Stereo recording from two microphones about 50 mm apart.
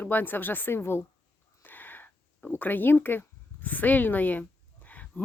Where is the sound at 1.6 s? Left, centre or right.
Left.